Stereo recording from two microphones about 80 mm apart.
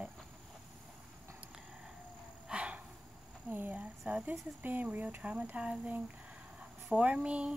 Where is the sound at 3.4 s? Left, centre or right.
Right.